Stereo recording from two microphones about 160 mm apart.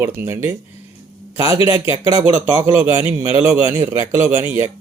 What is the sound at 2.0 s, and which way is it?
Speech, 40° left (ahead or behind).